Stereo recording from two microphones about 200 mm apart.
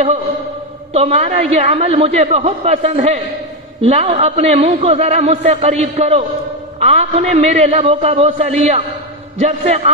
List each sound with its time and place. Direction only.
0.9 s a man's voice: 35° right (ahead or behind)